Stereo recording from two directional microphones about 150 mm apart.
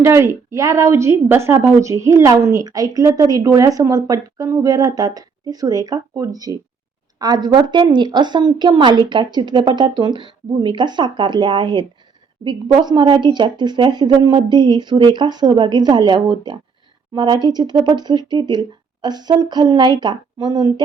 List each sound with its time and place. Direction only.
0.0 s a woman's voice: 20° right (ahead or behind)